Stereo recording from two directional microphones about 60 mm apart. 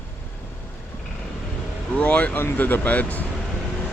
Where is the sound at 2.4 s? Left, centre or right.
Left.